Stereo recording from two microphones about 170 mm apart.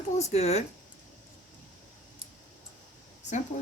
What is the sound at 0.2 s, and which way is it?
Speech, 40° left (ahead or behind).